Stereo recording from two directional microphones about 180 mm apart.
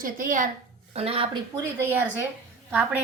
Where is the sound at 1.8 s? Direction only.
10° right (ahead or behind).